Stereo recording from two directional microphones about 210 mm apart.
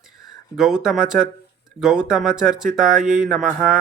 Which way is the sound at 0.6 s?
Centre (ahead or behind).